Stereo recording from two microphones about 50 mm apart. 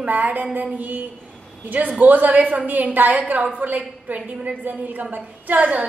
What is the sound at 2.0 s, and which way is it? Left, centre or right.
A woman's voice, right.